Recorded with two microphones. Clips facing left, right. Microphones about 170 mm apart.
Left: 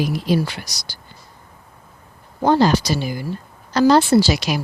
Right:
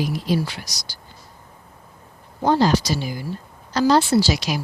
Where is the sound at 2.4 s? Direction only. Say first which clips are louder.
Left 2 dB; 65° left (ahead or behind).